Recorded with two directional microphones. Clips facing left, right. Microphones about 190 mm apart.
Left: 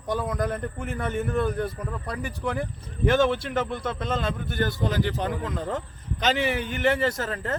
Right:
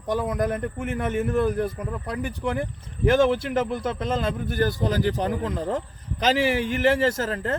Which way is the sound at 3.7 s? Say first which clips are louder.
Right 3 dB; 5° right (ahead or behind).